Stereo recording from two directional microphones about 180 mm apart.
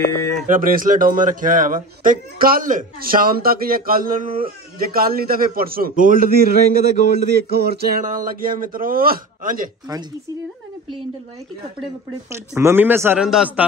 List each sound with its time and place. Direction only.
0.5 s speech: 50° right (ahead or behind)
12.3 s speech: 15° right (ahead or behind)